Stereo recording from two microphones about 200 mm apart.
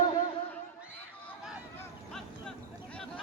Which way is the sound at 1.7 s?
10° left (ahead or behind).